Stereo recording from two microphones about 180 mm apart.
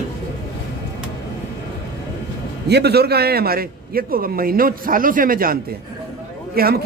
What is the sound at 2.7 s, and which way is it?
A man's voice, 65° right (ahead or behind).